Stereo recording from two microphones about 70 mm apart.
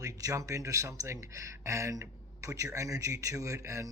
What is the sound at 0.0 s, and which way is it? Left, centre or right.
Speech, right.